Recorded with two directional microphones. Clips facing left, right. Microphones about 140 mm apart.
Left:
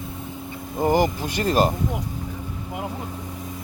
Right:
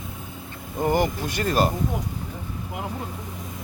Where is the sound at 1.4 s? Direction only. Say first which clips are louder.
Left 2 dB; 40° left (ahead or behind).